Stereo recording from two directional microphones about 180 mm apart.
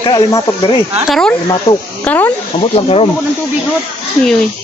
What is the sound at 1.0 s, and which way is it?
Speech, centre (ahead or behind).